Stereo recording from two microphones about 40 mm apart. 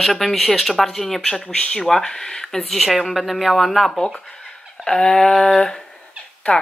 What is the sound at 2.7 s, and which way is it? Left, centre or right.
Speech, centre.